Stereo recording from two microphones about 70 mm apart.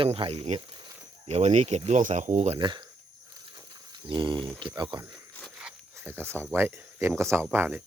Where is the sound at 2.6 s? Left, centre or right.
Right.